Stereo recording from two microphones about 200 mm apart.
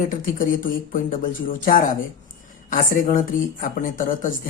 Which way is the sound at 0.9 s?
45° left (ahead or behind).